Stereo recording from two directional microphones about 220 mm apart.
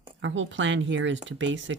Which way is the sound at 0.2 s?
60° right (ahead or behind).